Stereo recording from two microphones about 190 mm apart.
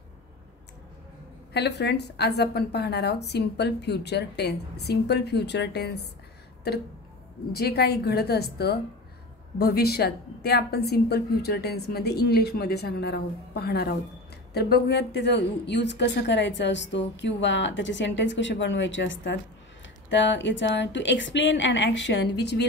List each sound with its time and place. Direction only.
1.5 s a woman's voice: 60° left (ahead or behind)
7.5 s a woman's voice: 55° left (ahead or behind)